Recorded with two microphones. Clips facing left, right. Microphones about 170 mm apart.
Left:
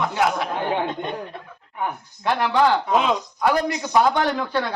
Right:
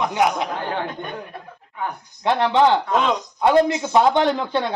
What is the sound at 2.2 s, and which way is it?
Speech, 20° right (ahead or behind).